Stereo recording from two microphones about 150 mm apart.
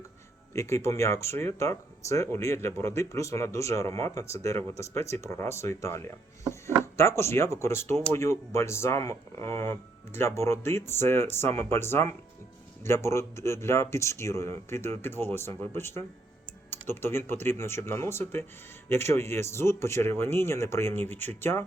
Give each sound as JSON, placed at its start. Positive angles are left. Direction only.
{"t": 0.5, "sound": "speech", "side_deg": 20}